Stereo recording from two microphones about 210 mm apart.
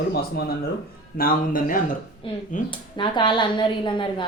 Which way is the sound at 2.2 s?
25° left (ahead or behind).